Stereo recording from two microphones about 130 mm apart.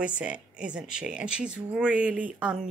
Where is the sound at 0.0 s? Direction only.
10° right (ahead or behind).